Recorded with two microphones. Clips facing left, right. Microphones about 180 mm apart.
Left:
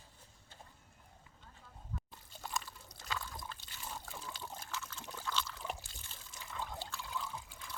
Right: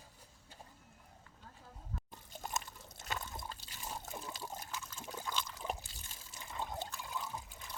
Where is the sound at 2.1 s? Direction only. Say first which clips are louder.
Right 2 dB; 20° right (ahead or behind).